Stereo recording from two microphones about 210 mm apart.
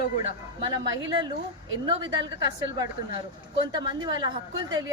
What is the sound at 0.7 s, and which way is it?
A woman's voice, 20° right (ahead or behind).